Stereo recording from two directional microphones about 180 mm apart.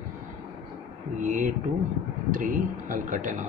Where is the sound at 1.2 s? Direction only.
45° right (ahead or behind).